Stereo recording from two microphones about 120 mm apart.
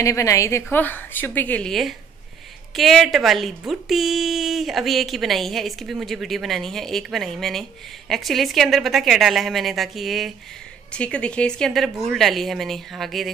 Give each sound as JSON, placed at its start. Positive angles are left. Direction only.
{"t": 0.0, "sound": "a woman's voice", "side_deg": 25}
{"t": 1.7, "sound": "a woman's voice", "side_deg": 0}